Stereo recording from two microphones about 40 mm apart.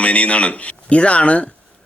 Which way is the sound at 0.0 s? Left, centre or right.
Left.